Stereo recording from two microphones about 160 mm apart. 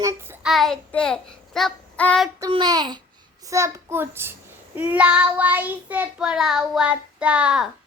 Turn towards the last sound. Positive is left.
turn(degrees=-5)  # may be behind; listen again after turning